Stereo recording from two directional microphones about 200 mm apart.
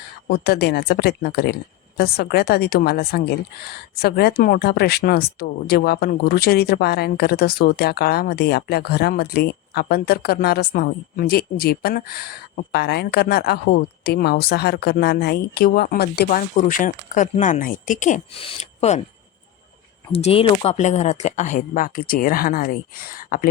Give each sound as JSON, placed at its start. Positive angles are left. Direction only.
{"t": 0.3, "sound": "a woman's voice", "side_deg": 50}
{"t": 20.1, "sound": "speech", "side_deg": 30}